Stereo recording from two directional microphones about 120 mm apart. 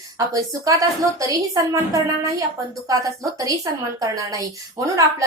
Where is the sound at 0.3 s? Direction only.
30° right (ahead or behind).